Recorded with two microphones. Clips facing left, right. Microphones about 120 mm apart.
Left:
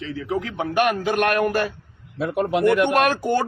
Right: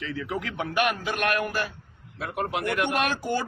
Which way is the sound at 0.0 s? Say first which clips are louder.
Left 5 dB; 30° left (ahead or behind).